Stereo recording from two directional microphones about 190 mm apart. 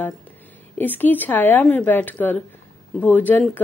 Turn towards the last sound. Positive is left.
turn(degrees=10)  # may be behind; listen again after turning